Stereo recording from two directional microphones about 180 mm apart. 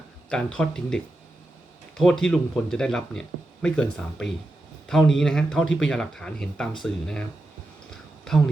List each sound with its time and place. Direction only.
0.3 s speech: 5° left (ahead or behind)